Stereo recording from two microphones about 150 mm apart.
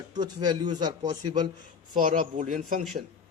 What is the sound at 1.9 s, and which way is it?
Speech, 60° right (ahead or behind).